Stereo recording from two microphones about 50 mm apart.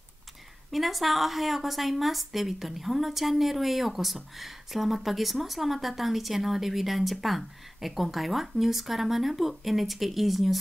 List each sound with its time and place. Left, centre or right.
0.7 s a woman's voice: centre